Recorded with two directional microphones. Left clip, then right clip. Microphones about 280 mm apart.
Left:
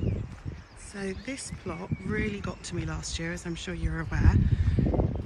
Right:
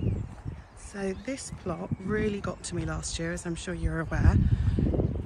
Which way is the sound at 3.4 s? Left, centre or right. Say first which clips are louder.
Right 1 dB; centre.